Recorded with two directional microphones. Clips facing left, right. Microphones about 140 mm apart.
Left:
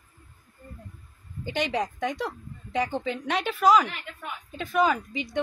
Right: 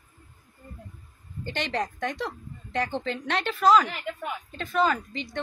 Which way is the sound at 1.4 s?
10° left (ahead or behind).